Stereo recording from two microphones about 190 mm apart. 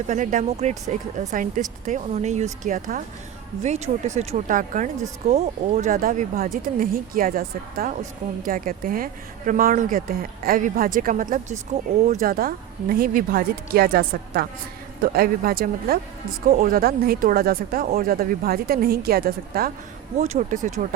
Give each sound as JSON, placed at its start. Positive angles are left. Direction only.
{"t": 0.1, "sound": "speech", "side_deg": -40}
{"t": 20.1, "sound": "speech", "side_deg": -35}